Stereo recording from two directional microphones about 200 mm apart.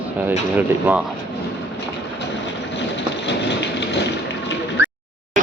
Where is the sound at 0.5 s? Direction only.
10° right (ahead or behind).